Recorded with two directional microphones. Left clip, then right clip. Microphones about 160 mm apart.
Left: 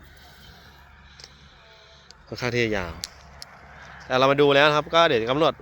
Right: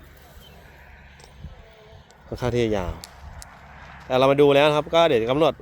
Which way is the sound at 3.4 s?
45° left (ahead or behind).